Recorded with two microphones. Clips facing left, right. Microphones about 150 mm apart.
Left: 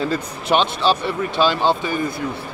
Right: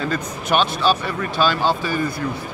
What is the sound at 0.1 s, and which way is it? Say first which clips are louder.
Speech: left 2 dB; 25° left (ahead or behind).